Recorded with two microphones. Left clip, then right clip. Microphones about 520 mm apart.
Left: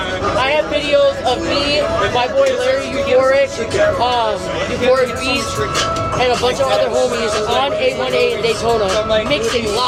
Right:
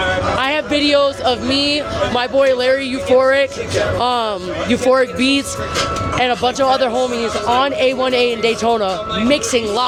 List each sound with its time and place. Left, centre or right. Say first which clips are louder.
0.3 s music: left 1 dB; right
3.2 s speech: left 1 dB; right
4.9 s speech: right 1 dB; right
6.2 s speech: even; right